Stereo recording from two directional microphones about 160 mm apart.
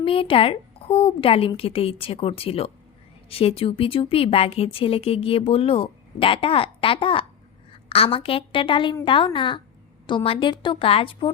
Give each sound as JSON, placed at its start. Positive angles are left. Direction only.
{"t": 0.0, "sound": "a woman's voice", "side_deg": 35}